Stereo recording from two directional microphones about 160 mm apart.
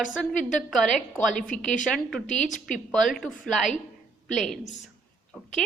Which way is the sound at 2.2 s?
50° left (ahead or behind).